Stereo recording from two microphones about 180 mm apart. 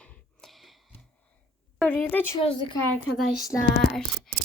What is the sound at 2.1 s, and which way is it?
Speech, 10° left (ahead or behind).